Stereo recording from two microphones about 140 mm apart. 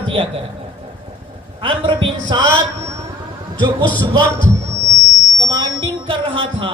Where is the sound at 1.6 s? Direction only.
40° right (ahead or behind).